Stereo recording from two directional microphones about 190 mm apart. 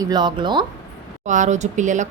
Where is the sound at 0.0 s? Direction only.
20° right (ahead or behind).